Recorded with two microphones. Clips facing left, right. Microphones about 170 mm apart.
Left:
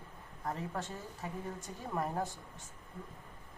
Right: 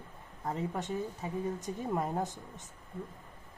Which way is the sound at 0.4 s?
20° right (ahead or behind).